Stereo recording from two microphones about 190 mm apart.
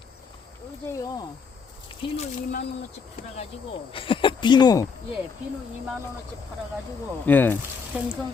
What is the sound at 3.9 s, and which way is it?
Speech, 25° left (ahead or behind).